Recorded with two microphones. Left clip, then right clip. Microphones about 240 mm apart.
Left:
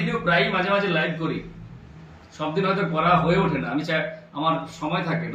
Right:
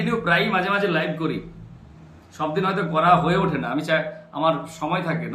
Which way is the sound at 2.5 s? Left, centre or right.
Right.